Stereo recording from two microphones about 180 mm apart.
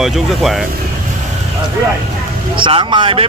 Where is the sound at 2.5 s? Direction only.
25° right (ahead or behind).